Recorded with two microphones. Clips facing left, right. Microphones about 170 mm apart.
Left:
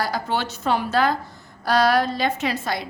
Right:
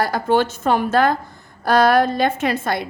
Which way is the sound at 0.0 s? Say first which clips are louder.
Right 7 dB; 50° right (ahead or behind).